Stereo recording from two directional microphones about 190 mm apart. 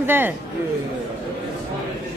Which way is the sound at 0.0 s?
10° right (ahead or behind).